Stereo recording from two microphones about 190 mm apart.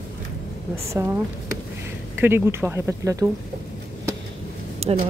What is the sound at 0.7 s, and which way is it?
Speech, 15° right (ahead or behind).